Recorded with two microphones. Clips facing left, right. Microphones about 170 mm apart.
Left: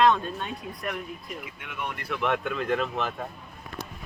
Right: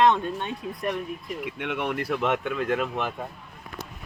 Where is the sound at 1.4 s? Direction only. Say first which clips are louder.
Right 9 dB; 70° right (ahead or behind).